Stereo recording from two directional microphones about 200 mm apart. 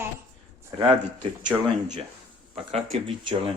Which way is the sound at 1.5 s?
10° right (ahead or behind).